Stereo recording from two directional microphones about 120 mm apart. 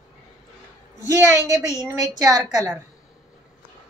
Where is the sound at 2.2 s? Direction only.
35° right (ahead or behind).